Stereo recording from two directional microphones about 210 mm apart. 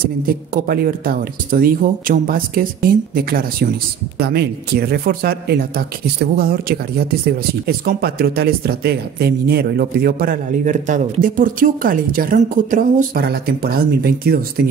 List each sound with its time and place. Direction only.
0.0 s speech: 45° right (ahead or behind)